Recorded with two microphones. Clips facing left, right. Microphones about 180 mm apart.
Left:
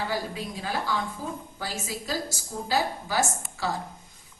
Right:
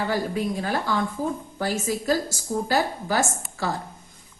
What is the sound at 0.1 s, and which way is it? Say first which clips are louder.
A woman's voice: right 6 dB; 55° right (ahead or behind).